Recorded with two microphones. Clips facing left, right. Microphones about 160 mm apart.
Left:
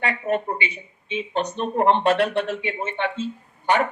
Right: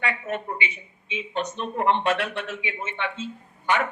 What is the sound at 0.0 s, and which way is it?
A man's voice, 35° left (ahead or behind).